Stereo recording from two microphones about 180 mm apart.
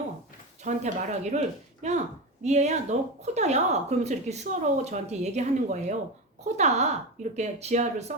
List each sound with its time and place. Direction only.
0.6 s speech: 40° right (ahead or behind)